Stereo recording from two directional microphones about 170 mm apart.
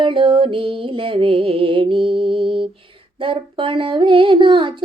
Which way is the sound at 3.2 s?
30° right (ahead or behind).